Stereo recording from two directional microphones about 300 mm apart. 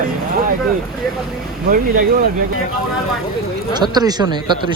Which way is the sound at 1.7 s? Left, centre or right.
Right.